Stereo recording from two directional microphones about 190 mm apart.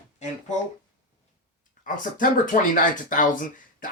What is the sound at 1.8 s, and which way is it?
Speech, 45° left (ahead or behind).